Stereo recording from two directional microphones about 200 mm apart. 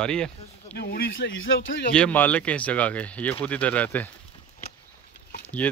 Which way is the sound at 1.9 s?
5° left (ahead or behind).